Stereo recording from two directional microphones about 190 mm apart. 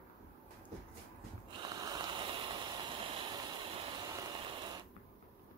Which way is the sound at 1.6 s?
20° right (ahead or behind).